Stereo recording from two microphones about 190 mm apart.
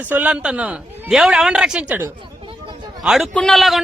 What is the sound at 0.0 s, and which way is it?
A man's voice, 10° right (ahead or behind).